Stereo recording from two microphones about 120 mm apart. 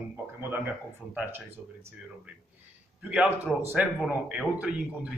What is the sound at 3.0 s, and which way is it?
A man's voice, 10° right (ahead or behind).